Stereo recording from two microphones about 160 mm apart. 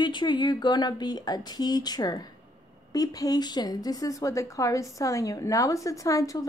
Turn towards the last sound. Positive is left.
turn(degrees=20)  # may be behind; listen again after turning